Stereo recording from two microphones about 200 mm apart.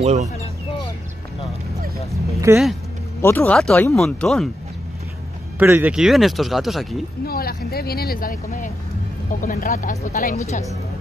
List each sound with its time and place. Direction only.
0.0 s speech: 35° right (ahead or behind)
2.5 s speech: 15° right (ahead or behind)
3.2 s speech: 10° left (ahead or behind)
5.6 s speech: 10° right (ahead or behind)
7.2 s speech: 50° left (ahead or behind)